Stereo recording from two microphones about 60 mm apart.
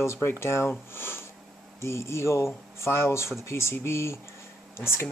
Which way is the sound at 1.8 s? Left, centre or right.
Left.